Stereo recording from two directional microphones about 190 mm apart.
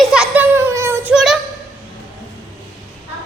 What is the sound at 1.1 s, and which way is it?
Child singing, centre (ahead or behind).